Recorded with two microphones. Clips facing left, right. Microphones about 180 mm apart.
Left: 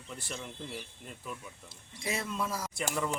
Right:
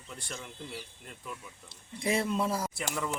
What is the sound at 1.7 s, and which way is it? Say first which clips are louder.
Speech: right 7 dB; 30° right (ahead or behind).